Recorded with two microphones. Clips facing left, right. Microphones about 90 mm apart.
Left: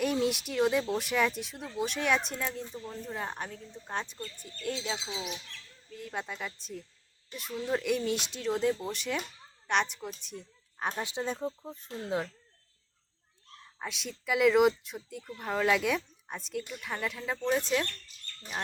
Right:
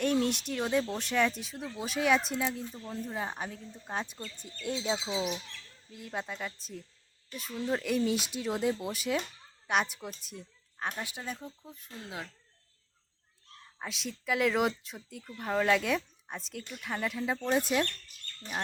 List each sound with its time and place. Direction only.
0.0 s speech: 5° left (ahead or behind)
4.6 s speech: 20° right (ahead or behind)
5.9 s speech: 5° right (ahead or behind)
10.8 s speech: 25° left (ahead or behind)
13.7 s speech: centre (ahead or behind)